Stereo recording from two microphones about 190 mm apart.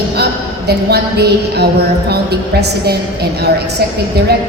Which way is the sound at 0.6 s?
60° right (ahead or behind).